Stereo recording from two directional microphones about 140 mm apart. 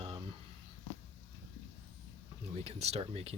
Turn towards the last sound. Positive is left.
turn(degrees=-45)  # may be behind; listen again after turning